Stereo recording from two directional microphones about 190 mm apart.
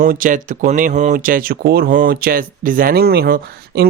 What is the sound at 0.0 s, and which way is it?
Speech, 45° right (ahead or behind).